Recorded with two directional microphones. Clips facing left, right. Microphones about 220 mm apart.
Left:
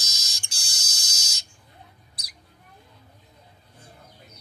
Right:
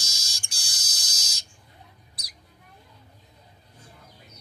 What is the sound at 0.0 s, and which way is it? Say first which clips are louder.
Fire alarm: left 1 dB; 20° left (ahead or behind).